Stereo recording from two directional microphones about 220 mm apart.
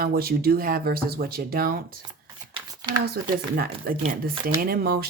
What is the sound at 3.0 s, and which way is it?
Speech, 45° right (ahead or behind).